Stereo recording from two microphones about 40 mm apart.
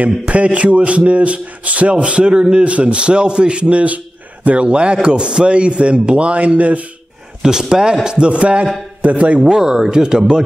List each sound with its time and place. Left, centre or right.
0.0 s a man's voice: right
7.7 s a man's voice: centre; by 9.4 s right
9.4 s speech: centre